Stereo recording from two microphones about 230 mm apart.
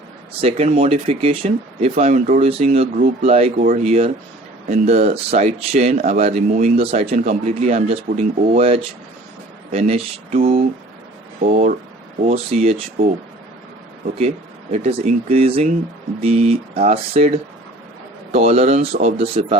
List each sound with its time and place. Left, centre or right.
0.4 s speech: right
14.2 s speech: right